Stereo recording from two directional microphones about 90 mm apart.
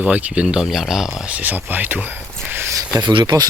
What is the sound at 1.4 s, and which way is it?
Speech, 20° right (ahead or behind).